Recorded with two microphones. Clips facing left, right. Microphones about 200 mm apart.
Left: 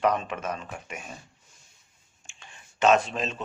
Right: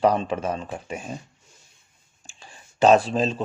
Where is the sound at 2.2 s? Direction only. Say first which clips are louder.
Right 4 dB; 35° right (ahead or behind).